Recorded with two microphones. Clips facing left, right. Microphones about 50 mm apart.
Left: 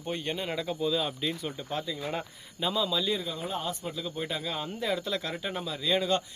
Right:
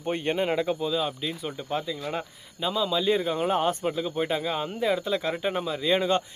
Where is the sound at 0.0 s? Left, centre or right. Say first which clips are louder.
Right 7 dB; right.